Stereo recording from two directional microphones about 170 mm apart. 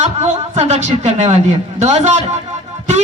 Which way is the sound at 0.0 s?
40° right (ahead or behind).